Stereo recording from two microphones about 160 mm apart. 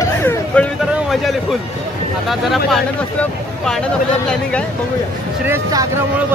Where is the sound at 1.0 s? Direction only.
Centre (ahead or behind).